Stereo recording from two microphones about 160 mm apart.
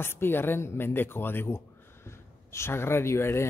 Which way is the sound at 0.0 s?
15° left (ahead or behind).